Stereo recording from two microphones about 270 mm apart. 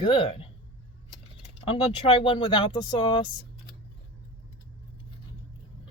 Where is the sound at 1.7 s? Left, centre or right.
Left.